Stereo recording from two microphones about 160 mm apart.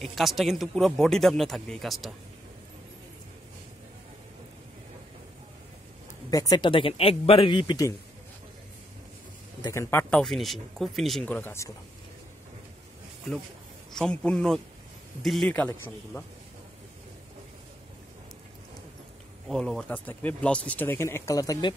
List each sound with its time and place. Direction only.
0.0 s speech: centre (ahead or behind)
6.3 s speech: 25° left (ahead or behind)
9.6 s speech: 20° left (ahead or behind)
13.9 s speech: 5° left (ahead or behind)
19.4 s speech: centre (ahead or behind); by 21.7 s 25° left (ahead or behind)